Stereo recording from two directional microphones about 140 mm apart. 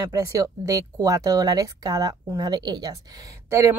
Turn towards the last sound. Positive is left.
turn(degrees=-20)  # may be behind; listen again after turning